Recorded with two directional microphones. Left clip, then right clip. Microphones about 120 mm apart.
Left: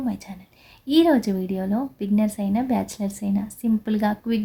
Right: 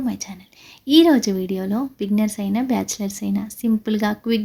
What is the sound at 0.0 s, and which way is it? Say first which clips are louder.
A woman's voice: right 3 dB; 20° right (ahead or behind).